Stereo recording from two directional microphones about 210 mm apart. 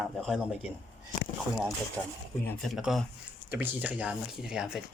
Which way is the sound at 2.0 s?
5° left (ahead or behind).